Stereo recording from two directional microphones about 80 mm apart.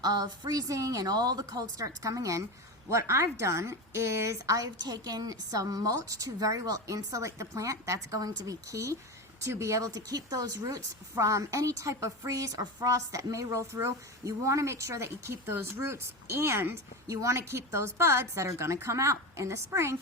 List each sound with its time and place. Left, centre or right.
0.0 s a woman's voice: right
1.6 s a woman's voice: right